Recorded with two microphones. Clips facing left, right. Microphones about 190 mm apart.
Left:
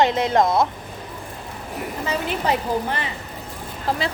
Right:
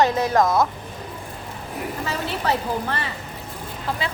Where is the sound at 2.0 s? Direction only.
15° left (ahead or behind).